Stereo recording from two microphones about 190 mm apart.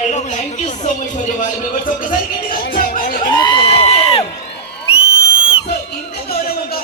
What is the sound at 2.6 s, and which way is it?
Music, 55° left (ahead or behind).